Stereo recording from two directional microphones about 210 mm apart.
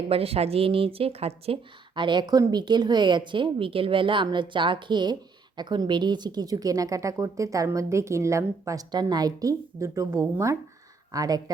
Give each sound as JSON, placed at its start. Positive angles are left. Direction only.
{"t": 0.1, "sound": "a woman's voice", "side_deg": -30}